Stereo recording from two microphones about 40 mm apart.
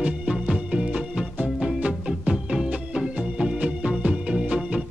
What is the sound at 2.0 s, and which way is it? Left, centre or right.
Music, centre.